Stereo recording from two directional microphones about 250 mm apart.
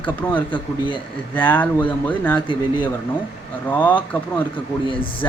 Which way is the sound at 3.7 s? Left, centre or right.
Centre.